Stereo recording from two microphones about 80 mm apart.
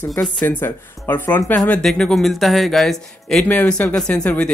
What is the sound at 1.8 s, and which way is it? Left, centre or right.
Speech, centre.